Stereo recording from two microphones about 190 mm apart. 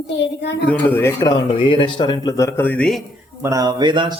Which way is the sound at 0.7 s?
10° left (ahead or behind).